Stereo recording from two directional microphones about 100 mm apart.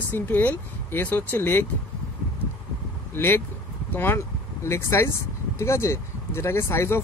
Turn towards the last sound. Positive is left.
turn(degrees=25)  # may be behind; listen again after turning